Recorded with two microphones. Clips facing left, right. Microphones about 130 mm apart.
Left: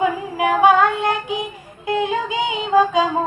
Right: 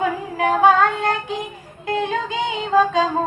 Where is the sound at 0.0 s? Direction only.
10° left (ahead or behind).